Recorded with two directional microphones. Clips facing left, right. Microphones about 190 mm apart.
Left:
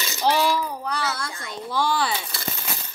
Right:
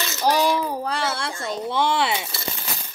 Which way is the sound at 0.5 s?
25° right (ahead or behind).